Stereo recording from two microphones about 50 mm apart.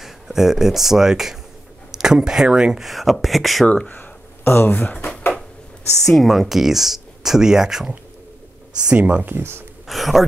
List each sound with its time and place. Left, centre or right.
0.0 s speech: centre
2.8 s speech: centre
3.6 s speech: centre
3.9 s a sound: left
5.9 s speech: centre
8.8 s speech: right
9.3 s speech: right
9.8 s speech: centre